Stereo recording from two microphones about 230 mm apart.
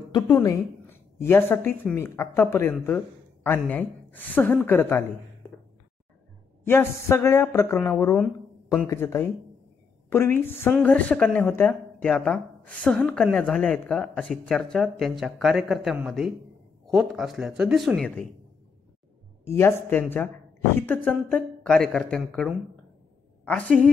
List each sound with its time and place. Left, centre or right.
0.1 s speech: centre
6.6 s a woman's voice: centre
19.5 s a woman's voice: centre